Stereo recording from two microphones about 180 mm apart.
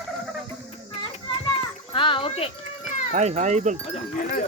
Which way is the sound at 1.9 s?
30° left (ahead or behind).